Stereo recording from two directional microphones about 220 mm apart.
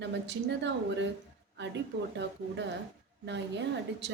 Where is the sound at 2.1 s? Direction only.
55° right (ahead or behind).